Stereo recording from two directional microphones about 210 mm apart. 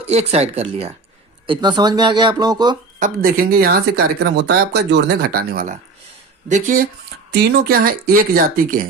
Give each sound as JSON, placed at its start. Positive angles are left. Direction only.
{"t": 0.1, "sound": "speech", "side_deg": -30}
{"t": 3.0, "sound": "speech", "side_deg": -45}
{"t": 7.3, "sound": "speech", "side_deg": -50}